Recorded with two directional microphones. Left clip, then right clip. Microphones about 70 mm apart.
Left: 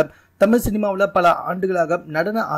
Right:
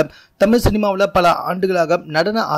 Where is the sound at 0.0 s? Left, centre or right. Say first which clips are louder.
Right 1 dB; right.